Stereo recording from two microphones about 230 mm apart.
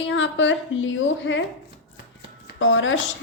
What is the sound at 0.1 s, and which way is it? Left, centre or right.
A woman's voice, left.